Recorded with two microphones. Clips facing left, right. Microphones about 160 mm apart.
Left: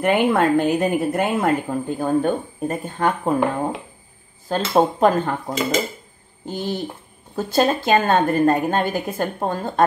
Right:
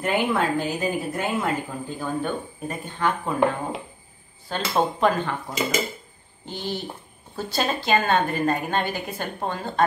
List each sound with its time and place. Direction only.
0.0 s speech: 55° left (ahead or behind); by 5.3 s 40° left (ahead or behind)
6.4 s speech: 45° left (ahead or behind)